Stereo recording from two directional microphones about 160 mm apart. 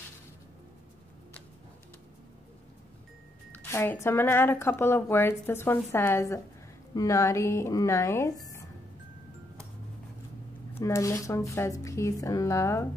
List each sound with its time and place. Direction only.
3.5 s speech: 15° left (ahead or behind)
10.7 s speech: 20° left (ahead or behind)